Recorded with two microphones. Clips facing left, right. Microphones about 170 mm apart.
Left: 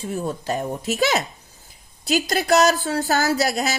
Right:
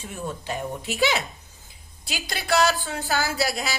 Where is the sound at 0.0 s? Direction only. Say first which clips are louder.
Left 6 dB; 40° left (ahead or behind).